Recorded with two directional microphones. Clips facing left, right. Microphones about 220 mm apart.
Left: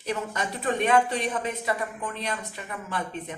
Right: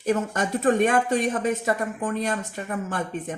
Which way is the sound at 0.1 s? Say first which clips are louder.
Right 7 dB; 45° right (ahead or behind).